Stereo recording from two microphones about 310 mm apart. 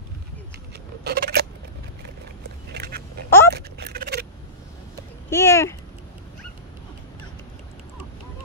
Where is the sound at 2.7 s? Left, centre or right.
Right.